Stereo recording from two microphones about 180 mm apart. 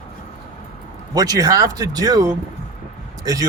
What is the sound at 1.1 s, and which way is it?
Speech, 20° right (ahead or behind).